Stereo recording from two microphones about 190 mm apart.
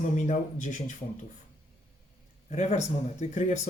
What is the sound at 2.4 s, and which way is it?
Speech, 35° left (ahead or behind).